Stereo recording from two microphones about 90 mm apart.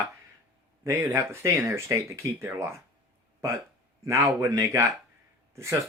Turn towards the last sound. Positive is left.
turn(degrees=-30)  # may be behind; listen again after turning